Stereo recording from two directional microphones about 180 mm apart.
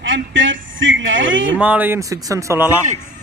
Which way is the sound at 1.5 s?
10° right (ahead or behind).